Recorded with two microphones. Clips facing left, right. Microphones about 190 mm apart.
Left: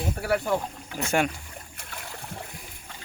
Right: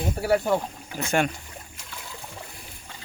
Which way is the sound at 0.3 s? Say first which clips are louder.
Right 3 dB; 25° right (ahead or behind).